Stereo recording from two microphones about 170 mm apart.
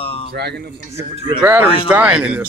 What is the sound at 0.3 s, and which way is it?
Speech, 70° right (ahead or behind).